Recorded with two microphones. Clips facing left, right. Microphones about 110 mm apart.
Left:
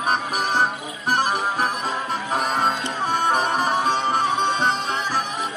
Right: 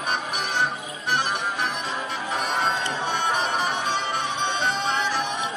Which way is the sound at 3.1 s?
40° left (ahead or behind).